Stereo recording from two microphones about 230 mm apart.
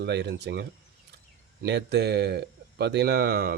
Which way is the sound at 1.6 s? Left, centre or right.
Right.